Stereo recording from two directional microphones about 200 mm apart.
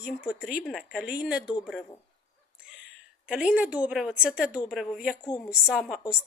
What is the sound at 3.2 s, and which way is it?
A woman's voice, 5° right (ahead or behind).